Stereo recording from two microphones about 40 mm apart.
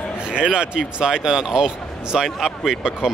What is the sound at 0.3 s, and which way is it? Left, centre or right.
Speech, right.